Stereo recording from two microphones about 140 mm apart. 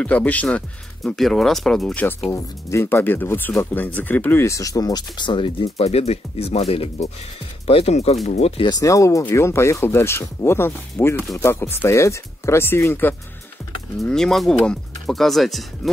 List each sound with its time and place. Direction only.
0.0 s speech: 10° left (ahead or behind)
2.3 s speech: 20° left (ahead or behind); by 8.6 s 45° left (ahead or behind)
8.6 s speech: 25° left (ahead or behind)
13.9 s speech: 5° left (ahead or behind)